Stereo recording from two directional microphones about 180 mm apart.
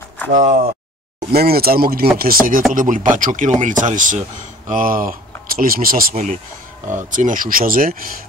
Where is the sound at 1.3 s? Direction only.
60° right (ahead or behind).